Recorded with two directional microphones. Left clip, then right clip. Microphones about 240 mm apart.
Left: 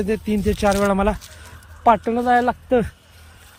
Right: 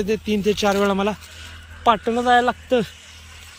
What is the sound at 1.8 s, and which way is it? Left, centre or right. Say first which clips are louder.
Speech: left 1 dB; left.